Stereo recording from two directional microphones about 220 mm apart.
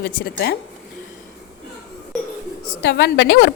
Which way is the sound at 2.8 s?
50° left (ahead or behind).